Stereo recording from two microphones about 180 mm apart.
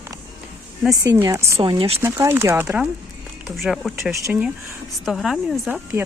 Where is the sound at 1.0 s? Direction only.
15° right (ahead or behind).